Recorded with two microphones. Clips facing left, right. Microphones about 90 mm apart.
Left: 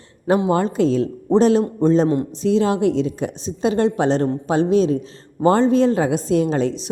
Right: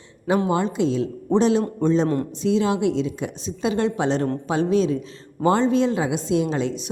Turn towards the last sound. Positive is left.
turn(degrees=40)  # may be behind; listen again after turning